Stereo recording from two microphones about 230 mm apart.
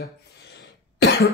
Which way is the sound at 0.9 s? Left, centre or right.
Left.